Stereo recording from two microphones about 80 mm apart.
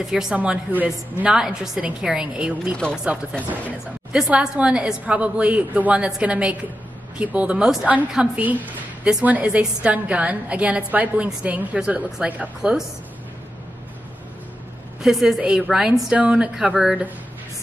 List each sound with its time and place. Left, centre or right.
0.0 s a woman's voice: centre
0.4 s a woman's voice: centre
4.1 s a woman's voice: centre
15.0 s a woman's voice: centre